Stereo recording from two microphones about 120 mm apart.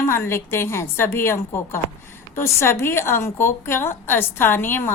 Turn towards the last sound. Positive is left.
turn(degrees=20)  # may be behind; listen again after turning